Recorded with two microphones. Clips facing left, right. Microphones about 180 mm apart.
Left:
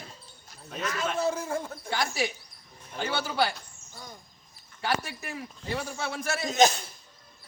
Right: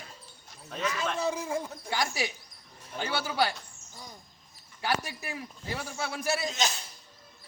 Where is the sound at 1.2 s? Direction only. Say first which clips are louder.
Left 3 dB; 15° right (ahead or behind).